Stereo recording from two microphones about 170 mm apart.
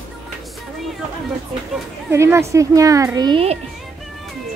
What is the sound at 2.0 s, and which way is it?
A woman's voice, 15° right (ahead or behind).